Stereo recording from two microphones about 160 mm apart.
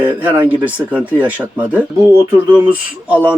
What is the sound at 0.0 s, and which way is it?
A man's voice, 15° right (ahead or behind).